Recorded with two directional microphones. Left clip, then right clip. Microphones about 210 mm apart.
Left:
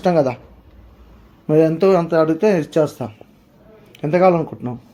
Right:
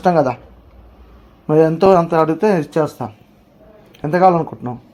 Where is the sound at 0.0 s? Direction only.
Centre (ahead or behind).